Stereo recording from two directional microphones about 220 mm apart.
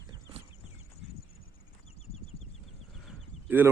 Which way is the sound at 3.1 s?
10° right (ahead or behind).